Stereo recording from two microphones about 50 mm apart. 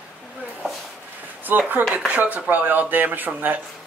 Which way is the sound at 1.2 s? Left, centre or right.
Right.